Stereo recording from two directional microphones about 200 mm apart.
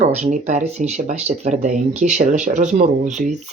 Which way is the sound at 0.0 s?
35° right (ahead or behind).